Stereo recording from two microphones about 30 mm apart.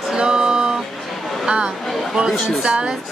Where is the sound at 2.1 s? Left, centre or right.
Right.